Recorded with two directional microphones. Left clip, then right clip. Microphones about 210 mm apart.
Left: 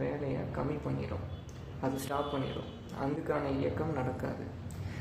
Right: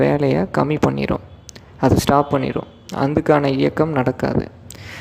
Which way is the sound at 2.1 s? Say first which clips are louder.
Right 18 dB; 45° right (ahead or behind).